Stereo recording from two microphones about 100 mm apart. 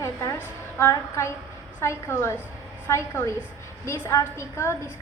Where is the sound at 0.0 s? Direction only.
30° left (ahead or behind).